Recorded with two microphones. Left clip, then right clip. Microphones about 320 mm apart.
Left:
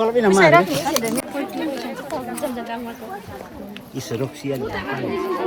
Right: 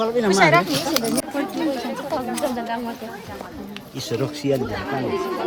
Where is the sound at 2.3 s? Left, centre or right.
Centre.